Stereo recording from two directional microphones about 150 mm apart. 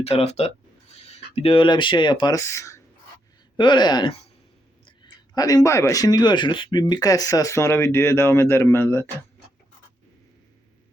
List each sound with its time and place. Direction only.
0.0 s speech: 45° left (ahead or behind); by 2.8 s 20° left (ahead or behind)
3.6 s speech: 30° left (ahead or behind)